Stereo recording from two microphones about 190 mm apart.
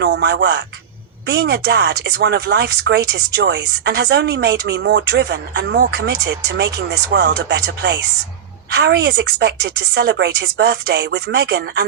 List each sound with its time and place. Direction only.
0.0 s speech: 60° right (ahead or behind)